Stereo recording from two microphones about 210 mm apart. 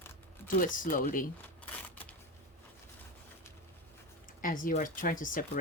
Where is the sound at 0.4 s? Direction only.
40° left (ahead or behind).